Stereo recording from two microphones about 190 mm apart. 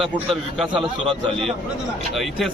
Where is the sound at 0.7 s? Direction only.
30° right (ahead or behind).